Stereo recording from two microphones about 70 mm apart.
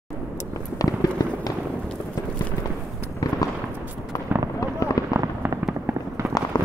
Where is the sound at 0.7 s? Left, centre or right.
Left.